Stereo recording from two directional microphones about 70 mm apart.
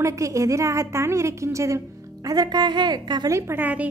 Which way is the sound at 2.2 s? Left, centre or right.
Right.